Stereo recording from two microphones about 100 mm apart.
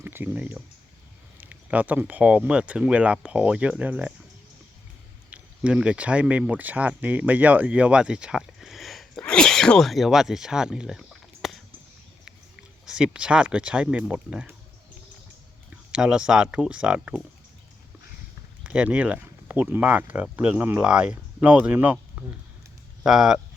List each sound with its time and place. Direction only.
0.0 s speech: 20° right (ahead or behind)
5.3 s speech: 10° right (ahead or behind)
15.7 s speech: 10° right (ahead or behind)
18.6 s speech: 10° right (ahead or behind)
23.0 s speech: 5° right (ahead or behind)